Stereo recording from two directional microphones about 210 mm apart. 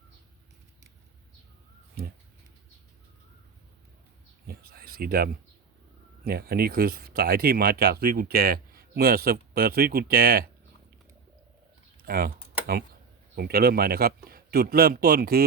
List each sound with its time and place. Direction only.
4.4 s a sound: 45° right (ahead or behind)
6.2 s speech: 45° right (ahead or behind)
12.0 s speech: 45° right (ahead or behind)
13.3 s speech: 45° right (ahead or behind)